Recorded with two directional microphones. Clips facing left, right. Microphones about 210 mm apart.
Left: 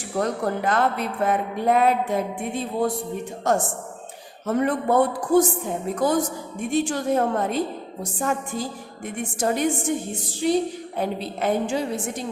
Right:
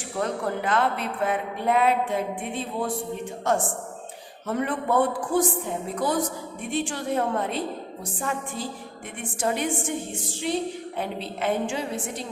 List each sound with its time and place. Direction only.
0.2 s speech: 40° left (ahead or behind)
3.5 s speech: 40° left (ahead or behind)